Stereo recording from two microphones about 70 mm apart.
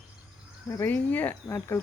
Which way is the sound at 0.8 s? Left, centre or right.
Left.